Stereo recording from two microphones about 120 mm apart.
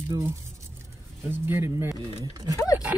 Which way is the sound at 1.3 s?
20° right (ahead or behind).